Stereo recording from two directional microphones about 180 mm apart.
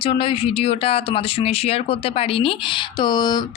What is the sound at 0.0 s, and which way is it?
Speech, 30° left (ahead or behind).